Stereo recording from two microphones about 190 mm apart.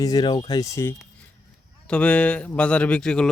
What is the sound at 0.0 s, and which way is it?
A man's voice, 20° left (ahead or behind).